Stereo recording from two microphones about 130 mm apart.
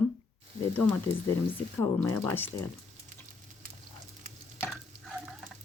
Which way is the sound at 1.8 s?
20° left (ahead or behind).